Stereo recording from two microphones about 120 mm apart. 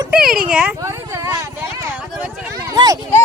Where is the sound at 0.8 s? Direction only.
25° right (ahead or behind).